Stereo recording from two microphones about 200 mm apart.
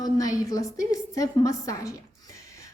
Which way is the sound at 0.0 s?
15° left (ahead or behind).